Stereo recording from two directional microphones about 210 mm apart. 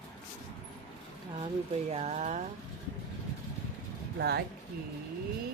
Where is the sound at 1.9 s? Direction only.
30° right (ahead or behind).